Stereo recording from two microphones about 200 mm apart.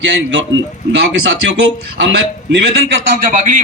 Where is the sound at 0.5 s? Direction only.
70° right (ahead or behind).